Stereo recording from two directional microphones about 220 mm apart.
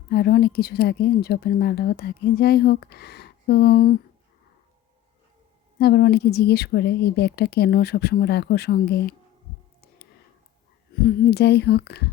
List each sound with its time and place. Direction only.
0.1 s speech: 45° left (ahead or behind)
5.8 s speech: 45° left (ahead or behind)
11.0 s speech: 50° left (ahead or behind)